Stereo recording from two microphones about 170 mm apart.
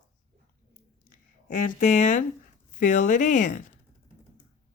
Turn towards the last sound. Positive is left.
turn(degrees=45)  # may be behind; listen again after turning